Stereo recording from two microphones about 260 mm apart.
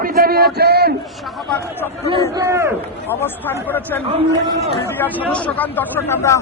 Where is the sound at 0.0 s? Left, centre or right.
Right.